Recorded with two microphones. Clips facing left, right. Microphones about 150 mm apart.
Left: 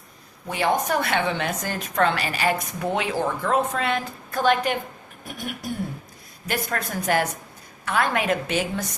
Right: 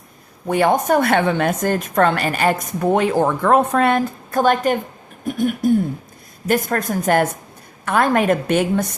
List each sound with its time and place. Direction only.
0.4 s a woman's voice: 50° right (ahead or behind)